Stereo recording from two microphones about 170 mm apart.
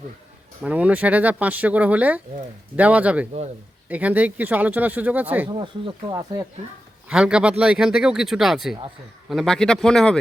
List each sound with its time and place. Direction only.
0.6 s speech: 10° right (ahead or behind)
5.5 s speech: 25° right (ahead or behind)
7.1 s speech: 5° right (ahead or behind)